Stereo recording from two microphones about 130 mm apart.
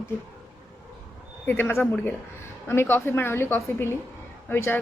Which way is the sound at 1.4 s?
15° left (ahead or behind).